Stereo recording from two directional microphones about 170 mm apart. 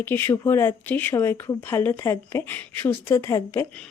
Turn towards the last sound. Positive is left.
turn(degrees=15)  # may be behind; listen again after turning